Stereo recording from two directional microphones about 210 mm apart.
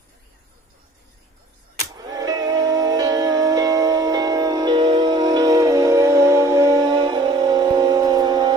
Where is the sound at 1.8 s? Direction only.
15° right (ahead or behind).